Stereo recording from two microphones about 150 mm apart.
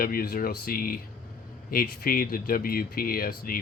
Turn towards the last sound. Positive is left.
turn(degrees=70)  # may be behind; listen again after turning